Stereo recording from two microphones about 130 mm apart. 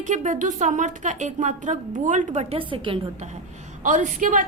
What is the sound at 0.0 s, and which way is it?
A woman's voice, 70° right (ahead or behind).